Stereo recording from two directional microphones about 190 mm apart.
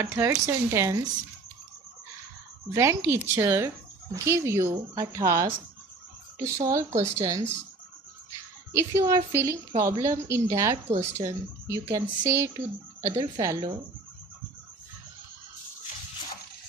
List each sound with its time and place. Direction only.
0.0 s speech: 15° right (ahead or behind)
2.7 s speech: 15° right (ahead or behind)
8.7 s speech: 15° right (ahead or behind)